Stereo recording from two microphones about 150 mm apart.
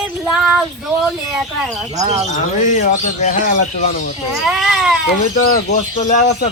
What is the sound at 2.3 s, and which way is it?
Speech, 60° left (ahead or behind).